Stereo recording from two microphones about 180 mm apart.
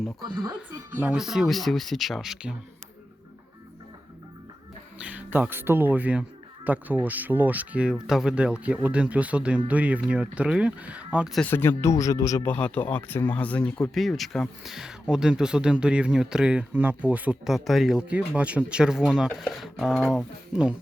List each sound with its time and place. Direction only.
0.2 s speech: 25° right (ahead or behind)
0.9 s speech: 5° right (ahead or behind)
4.9 s speech: 10° right (ahead or behind)